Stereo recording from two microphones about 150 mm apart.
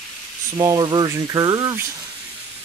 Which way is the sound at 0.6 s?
25° right (ahead or behind).